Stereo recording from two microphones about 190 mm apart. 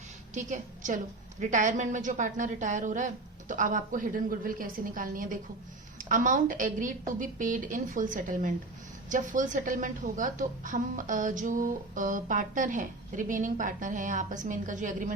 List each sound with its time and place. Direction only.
0.3 s a woman's voice: 40° right (ahead or behind)